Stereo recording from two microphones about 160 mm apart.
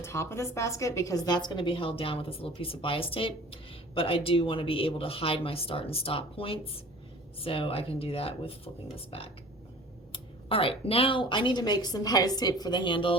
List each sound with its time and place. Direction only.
0.0 s a woman's voice: 15° left (ahead or behind); by 13.1 s 30° left (ahead or behind)